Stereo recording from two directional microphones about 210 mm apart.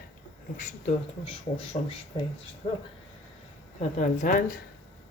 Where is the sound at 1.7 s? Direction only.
35° left (ahead or behind).